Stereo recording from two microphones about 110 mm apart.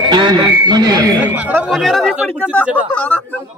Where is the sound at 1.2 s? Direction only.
15° right (ahead or behind).